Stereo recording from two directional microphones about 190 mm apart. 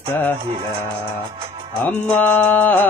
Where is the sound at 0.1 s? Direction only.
10° left (ahead or behind).